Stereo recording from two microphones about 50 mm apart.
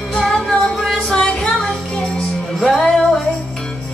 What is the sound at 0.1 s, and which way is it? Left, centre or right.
Music, centre.